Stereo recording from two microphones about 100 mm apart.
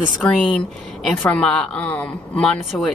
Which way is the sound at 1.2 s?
10° left (ahead or behind).